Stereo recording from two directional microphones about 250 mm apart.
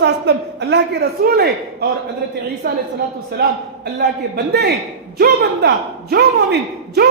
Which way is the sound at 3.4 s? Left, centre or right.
Right.